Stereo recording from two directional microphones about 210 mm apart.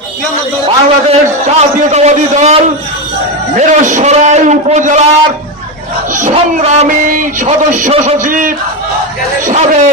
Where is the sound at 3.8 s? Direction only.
35° right (ahead or behind).